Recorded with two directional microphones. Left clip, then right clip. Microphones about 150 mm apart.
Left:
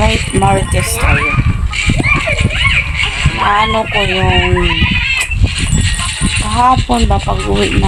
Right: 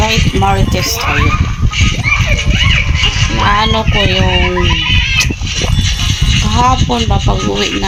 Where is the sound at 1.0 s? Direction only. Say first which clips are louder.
Left 2 dB; 25° left (ahead or behind).